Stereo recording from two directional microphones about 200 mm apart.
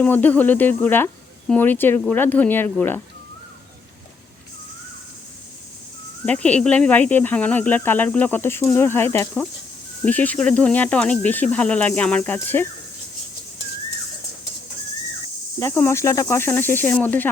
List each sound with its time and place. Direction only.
0.0 s speech: 10° left (ahead or behind)
6.2 s speech: 5° left (ahead or behind)
15.5 s speech: 10° left (ahead or behind)